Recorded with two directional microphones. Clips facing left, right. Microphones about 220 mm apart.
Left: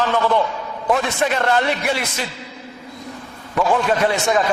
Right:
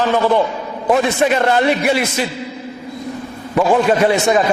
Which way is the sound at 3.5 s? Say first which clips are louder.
Right 5 dB; 20° right (ahead or behind).